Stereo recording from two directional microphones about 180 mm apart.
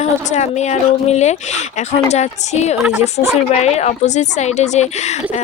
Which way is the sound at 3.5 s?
40° left (ahead or behind).